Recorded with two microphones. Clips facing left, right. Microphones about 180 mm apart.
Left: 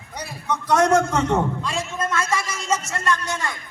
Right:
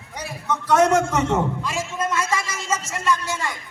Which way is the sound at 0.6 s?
5° right (ahead or behind).